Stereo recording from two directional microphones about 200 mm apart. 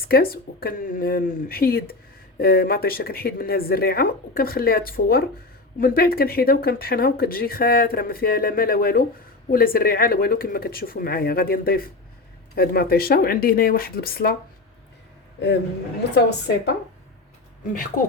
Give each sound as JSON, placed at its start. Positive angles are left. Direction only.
{"t": 0.0, "sound": "speech", "side_deg": 50}
{"t": 16.0, "sound": "a woman's voice", "side_deg": 60}